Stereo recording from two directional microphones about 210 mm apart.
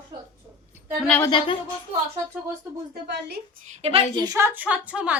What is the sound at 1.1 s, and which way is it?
Speech, 10° left (ahead or behind).